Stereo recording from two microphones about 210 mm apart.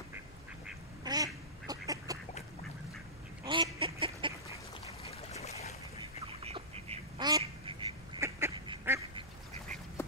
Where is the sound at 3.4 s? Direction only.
20° right (ahead or behind).